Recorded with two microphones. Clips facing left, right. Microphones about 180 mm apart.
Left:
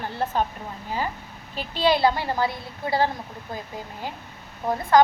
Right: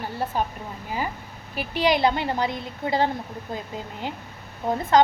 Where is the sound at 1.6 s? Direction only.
15° right (ahead or behind).